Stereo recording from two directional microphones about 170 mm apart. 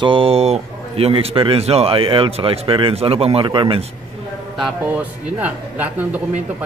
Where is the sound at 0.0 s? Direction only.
30° right (ahead or behind).